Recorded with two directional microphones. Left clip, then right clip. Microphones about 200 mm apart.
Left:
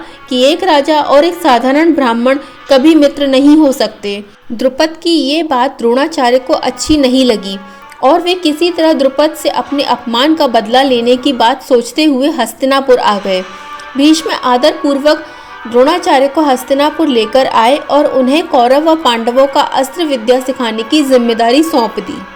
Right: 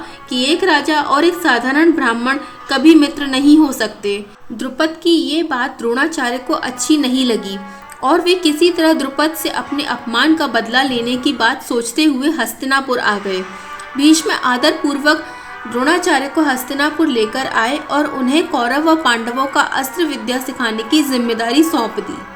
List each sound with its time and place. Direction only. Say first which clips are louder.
0.3 s a woman's voice: left 5 dB; 25° left (ahead or behind)